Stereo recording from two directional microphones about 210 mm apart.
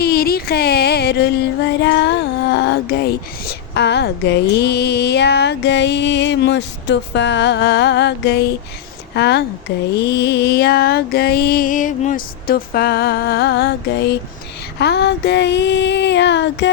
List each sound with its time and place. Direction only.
0.0 s music: 45° left (ahead or behind)
14.8 s female singing: 55° left (ahead or behind)